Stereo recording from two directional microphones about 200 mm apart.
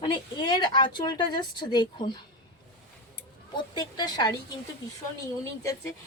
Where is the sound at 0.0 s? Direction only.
20° left (ahead or behind).